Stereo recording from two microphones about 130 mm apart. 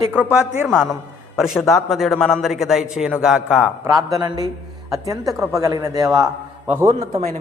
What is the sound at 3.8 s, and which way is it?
A man's voice, 25° right (ahead or behind).